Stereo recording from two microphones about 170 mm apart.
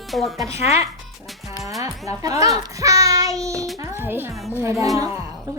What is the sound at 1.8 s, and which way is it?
A child's voice, 20° right (ahead or behind).